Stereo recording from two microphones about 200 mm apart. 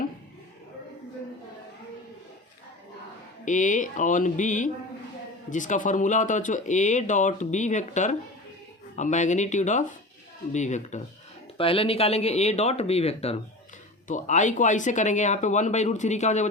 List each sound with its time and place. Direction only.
3.4 s speech: 40° left (ahead or behind)